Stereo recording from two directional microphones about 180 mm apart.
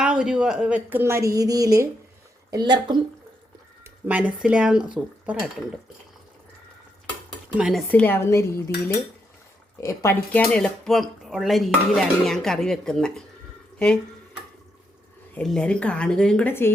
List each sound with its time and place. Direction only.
0.0 s a woman's voice: 5° right (ahead or behind); by 3.0 s 25° right (ahead or behind)
4.0 s speech: 10° right (ahead or behind)
7.5 s dishes: centre (ahead or behind); by 9.0 s 15° left (ahead or behind)
9.8 s speech: 15° left (ahead or behind)
15.4 s speech: 5° left (ahead or behind)